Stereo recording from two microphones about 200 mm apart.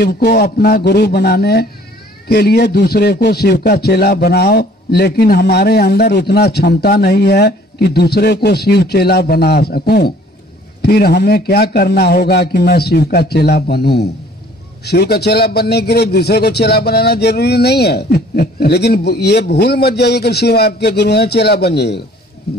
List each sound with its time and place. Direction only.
0.0 s a man's voice: 50° left (ahead or behind)